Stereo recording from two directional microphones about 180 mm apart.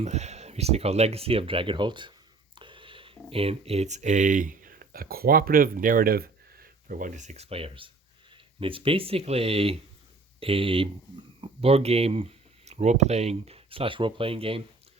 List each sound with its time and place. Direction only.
0.0 s speech: 40° right (ahead or behind)